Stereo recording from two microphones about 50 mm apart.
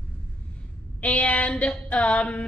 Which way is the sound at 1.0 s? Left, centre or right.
Left.